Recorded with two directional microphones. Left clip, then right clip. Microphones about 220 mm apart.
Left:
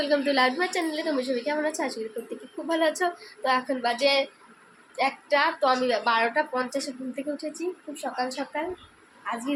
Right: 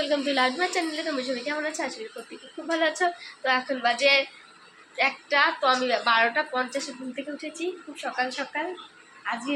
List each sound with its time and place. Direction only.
0.0 s a woman's voice: 25° left (ahead or behind)